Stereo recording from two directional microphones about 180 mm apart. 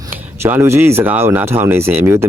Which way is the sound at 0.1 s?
10° right (ahead or behind).